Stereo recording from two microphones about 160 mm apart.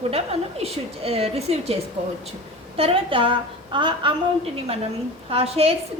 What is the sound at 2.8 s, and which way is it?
A woman's voice, 35° right (ahead or behind).